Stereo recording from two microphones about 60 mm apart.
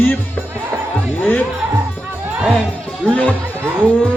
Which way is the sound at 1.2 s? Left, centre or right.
Left.